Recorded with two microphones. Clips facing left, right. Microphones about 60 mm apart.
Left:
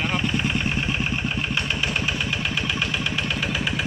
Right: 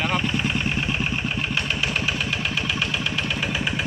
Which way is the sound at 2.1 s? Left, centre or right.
Centre.